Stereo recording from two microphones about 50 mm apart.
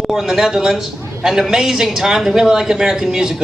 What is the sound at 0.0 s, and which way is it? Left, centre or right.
Speech, centre.